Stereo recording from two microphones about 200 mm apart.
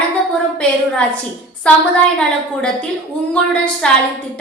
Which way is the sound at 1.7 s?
5° left (ahead or behind).